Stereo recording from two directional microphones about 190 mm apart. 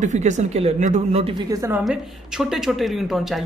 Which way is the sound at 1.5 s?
15° right (ahead or behind).